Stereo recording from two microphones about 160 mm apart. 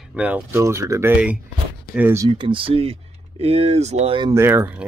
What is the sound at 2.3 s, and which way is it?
Speech, 30° right (ahead or behind).